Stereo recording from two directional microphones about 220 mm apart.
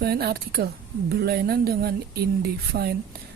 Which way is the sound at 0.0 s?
45° right (ahead or behind).